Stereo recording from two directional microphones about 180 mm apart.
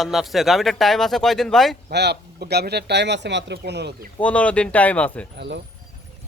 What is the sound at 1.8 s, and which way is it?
Speech, 65° right (ahead or behind).